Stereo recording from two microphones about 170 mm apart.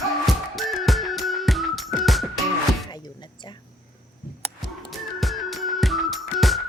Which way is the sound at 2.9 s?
25° left (ahead or behind).